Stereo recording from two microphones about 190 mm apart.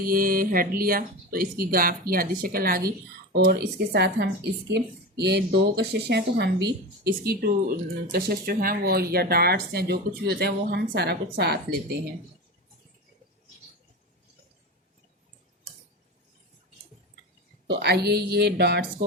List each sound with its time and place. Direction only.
0.0 s speech: 50° right (ahead or behind)
17.7 s speech: 60° right (ahead or behind)